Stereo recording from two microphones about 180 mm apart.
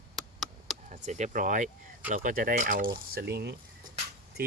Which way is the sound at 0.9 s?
45° right (ahead or behind).